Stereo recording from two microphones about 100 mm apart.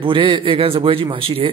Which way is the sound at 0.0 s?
60° right (ahead or behind).